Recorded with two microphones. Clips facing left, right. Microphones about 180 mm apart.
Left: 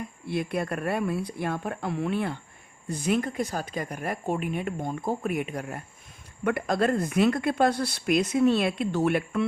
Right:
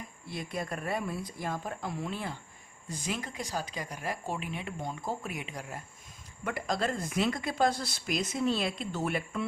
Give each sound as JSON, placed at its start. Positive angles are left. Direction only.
{"t": 0.3, "sound": "speech", "side_deg": 65}